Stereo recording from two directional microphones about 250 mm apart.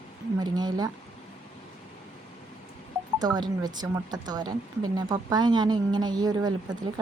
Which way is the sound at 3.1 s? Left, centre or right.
Centre.